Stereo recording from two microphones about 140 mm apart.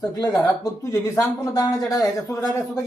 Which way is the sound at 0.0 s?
25° left (ahead or behind).